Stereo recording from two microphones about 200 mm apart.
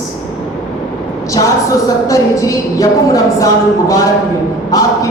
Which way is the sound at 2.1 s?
15° left (ahead or behind).